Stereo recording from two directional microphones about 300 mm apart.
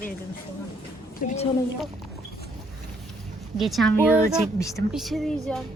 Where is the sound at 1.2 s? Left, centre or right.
Left.